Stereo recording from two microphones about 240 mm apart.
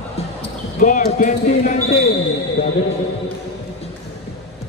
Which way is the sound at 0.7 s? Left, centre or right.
Left.